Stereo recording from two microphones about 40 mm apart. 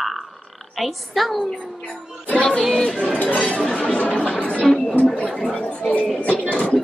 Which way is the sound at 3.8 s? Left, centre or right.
Left.